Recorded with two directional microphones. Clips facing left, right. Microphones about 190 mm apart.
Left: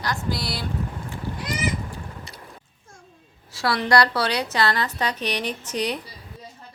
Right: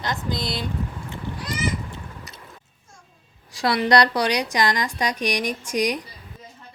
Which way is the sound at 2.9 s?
55° left (ahead or behind).